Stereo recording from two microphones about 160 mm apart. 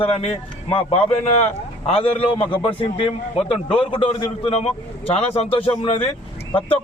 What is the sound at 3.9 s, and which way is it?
A man's voice, 35° left (ahead or behind).